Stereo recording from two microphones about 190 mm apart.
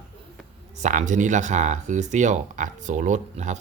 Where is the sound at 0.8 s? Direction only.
40° right (ahead or behind).